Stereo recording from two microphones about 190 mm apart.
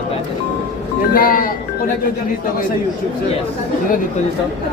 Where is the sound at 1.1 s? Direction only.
50° left (ahead or behind).